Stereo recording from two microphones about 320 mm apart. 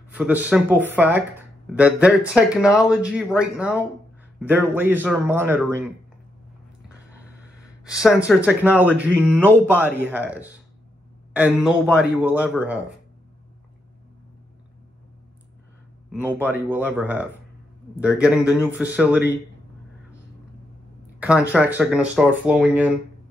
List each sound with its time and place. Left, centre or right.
0.1 s a man's voice: centre
8.0 s speech: centre
16.3 s a man's voice: centre
21.2 s speech: centre